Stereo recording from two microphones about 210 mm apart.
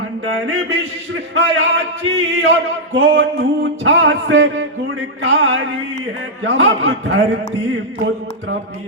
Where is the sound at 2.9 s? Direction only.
60° right (ahead or behind).